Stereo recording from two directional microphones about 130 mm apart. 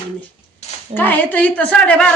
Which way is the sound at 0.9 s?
15° left (ahead or behind).